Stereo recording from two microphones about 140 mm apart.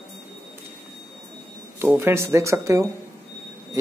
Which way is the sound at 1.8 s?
15° right (ahead or behind).